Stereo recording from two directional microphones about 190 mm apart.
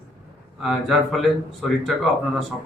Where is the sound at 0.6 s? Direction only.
Centre (ahead or behind).